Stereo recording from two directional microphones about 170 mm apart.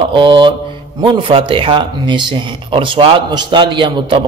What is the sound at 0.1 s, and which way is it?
A man's voice, 30° right (ahead or behind).